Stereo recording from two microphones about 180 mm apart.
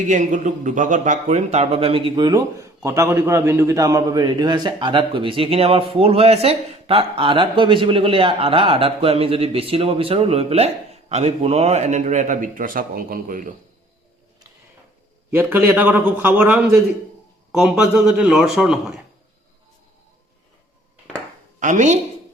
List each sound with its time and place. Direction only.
0.1 s speech: 45° right (ahead or behind)
15.3 s a man's voice: 10° right (ahead or behind)
21.6 s speech: 45° right (ahead or behind)